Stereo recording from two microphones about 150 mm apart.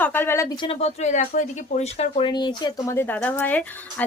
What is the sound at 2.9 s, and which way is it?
A woman's voice, 10° left (ahead or behind).